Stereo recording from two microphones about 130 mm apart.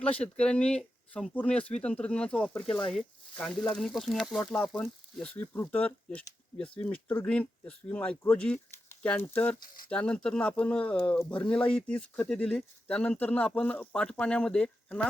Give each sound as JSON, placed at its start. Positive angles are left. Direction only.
{"t": 0.0, "sound": "speech", "side_deg": 10}
{"t": 9.6, "sound": "speech", "side_deg": 90}
{"t": 9.9, "sound": "speech", "side_deg": 10}